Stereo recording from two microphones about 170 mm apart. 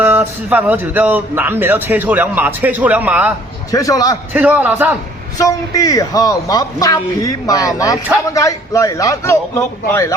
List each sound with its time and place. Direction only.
0.0 s speech: 10° right (ahead or behind)
3.7 s a man's voice: 20° left (ahead or behind)
4.4 s speech: 10° right (ahead or behind)
5.4 s a man's voice: 20° left (ahead or behind)